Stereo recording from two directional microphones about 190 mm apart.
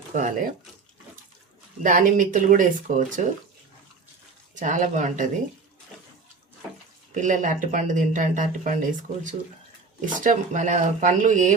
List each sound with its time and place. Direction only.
0.1 s speech: 45° right (ahead or behind)
1.8 s speech: 45° right (ahead or behind)
4.5 s speech: 40° right (ahead or behind)
7.1 s speech: 40° right (ahead or behind)